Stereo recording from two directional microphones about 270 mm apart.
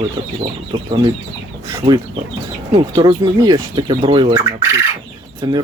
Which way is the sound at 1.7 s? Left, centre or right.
Centre.